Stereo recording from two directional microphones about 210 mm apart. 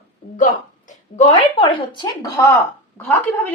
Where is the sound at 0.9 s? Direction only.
30° left (ahead or behind); by 3.1 s 10° left (ahead or behind).